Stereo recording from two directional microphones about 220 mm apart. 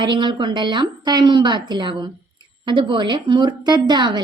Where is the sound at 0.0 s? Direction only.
20° right (ahead or behind).